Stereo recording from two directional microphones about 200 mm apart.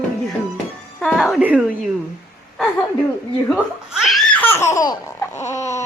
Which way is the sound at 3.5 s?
Centre (ahead or behind).